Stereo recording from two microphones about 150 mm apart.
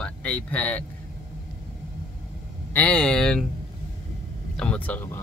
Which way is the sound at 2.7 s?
10° left (ahead or behind).